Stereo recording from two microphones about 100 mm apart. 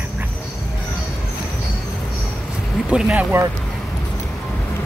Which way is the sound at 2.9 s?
15° right (ahead or behind).